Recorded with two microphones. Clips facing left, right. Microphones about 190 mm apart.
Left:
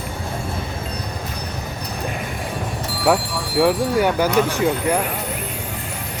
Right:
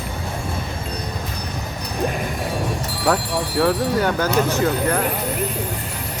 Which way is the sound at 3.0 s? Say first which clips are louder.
Left 1 dB; 10° left (ahead or behind).